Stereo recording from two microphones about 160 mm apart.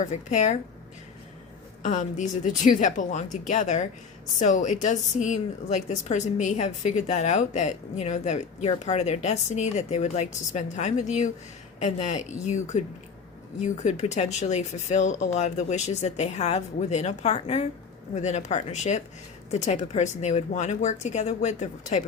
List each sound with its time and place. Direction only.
0.0 s a woman's voice: 50° left (ahead or behind)
1.8 s a woman's voice: 50° left (ahead or behind)